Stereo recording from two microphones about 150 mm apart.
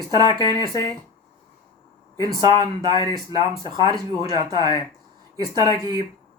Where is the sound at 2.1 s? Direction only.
25° right (ahead or behind).